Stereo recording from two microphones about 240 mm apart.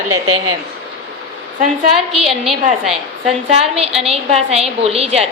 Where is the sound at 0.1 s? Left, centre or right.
Right.